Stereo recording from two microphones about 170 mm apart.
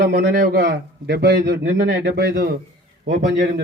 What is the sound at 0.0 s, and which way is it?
A man's voice, 90° right.